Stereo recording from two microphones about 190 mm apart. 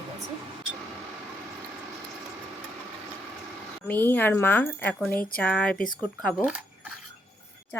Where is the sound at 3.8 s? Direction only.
10° left (ahead or behind).